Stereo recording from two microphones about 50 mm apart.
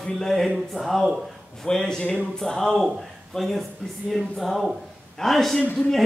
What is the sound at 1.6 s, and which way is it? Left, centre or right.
A man's voice, centre.